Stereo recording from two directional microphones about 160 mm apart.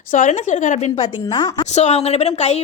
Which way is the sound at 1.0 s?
25° left (ahead or behind).